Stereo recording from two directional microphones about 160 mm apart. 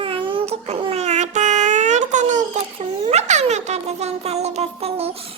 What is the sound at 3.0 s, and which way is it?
Speech, 45° right (ahead or behind).